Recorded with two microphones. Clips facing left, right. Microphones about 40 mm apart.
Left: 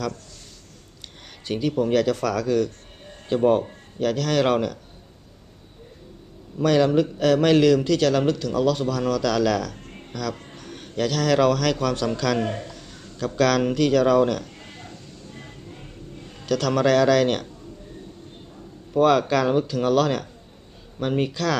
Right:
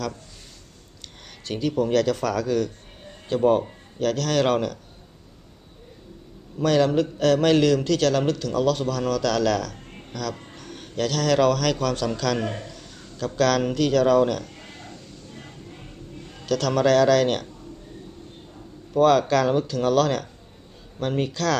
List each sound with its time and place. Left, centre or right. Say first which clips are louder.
1.5 s speech: left 1 dB; centre
6.6 s a man's voice: left 1 dB; centre
16.3 s speech: left 1 dB; centre
18.9 s speech: even; centre